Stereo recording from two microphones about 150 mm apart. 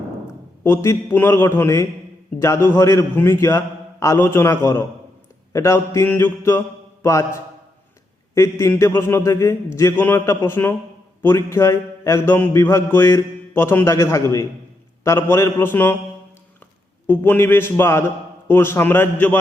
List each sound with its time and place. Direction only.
0.6 s a man's voice: 15° left (ahead or behind)
17.1 s a man's voice: 15° left (ahead or behind)